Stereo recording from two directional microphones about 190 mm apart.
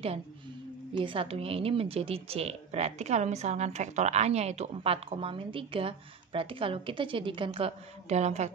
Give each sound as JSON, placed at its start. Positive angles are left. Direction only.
{"t": 0.9, "sound": "speech", "side_deg": -25}